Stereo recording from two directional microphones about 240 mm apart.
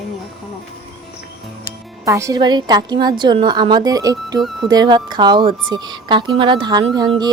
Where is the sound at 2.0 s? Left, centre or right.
Centre.